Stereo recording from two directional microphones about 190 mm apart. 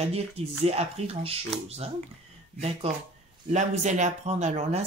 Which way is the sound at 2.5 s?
35° right (ahead or behind).